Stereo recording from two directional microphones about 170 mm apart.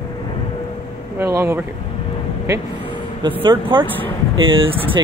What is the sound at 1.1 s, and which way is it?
Speech, 15° right (ahead or behind).